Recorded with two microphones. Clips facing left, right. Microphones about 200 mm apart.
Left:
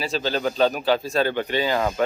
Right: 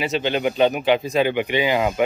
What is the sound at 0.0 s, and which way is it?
Speech, 20° right (ahead or behind).